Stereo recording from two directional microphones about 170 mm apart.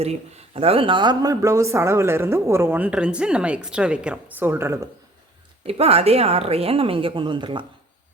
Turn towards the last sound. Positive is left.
turn(degrees=-30)  # may be behind; listen again after turning